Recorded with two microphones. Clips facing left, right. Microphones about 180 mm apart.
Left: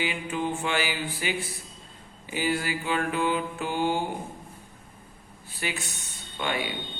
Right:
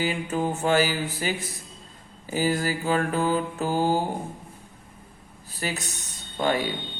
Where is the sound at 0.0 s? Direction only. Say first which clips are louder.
Right 3 dB; 40° right (ahead or behind).